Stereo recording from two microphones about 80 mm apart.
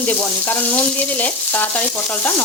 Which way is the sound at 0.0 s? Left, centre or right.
Left.